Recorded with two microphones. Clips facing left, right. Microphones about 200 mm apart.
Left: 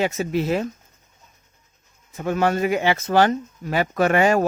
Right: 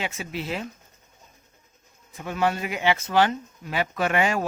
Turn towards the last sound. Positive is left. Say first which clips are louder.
# left 6 dB
turn(degrees=45)  # may be behind; listen again after turning